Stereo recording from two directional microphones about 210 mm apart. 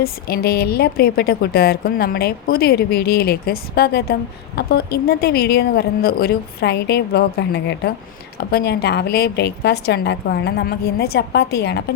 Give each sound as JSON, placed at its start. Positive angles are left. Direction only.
{"t": 0.0, "sound": "a woman's voice", "side_deg": 45}